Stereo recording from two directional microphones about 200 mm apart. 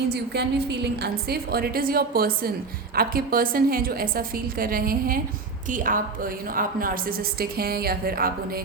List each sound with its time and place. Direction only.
0.1 s a woman's voice: 55° right (ahead or behind)